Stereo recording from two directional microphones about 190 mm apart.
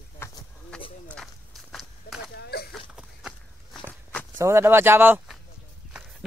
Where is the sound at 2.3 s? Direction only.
60° left (ahead or behind).